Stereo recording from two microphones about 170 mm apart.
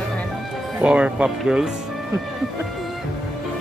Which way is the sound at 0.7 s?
5° right (ahead or behind).